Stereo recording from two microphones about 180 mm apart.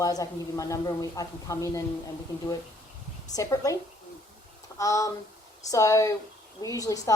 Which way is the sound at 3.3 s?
20° left (ahead or behind).